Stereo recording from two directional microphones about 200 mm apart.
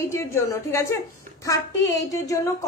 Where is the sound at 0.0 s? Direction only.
15° left (ahead or behind).